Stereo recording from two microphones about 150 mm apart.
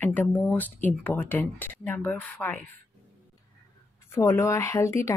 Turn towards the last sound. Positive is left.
turn(degrees=20)  # may be behind; listen again after turning